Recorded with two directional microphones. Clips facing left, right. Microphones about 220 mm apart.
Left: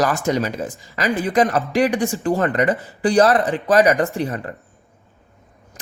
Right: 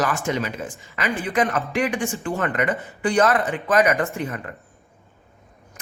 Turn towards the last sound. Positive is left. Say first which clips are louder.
# left 4 dB
turn(degrees=35)  # may be behind; listen again after turning